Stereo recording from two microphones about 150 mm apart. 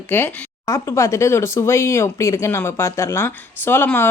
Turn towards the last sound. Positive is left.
turn(degrees=15)  # may be behind; listen again after turning